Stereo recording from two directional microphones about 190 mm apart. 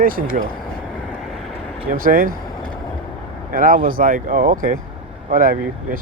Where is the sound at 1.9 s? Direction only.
45° right (ahead or behind).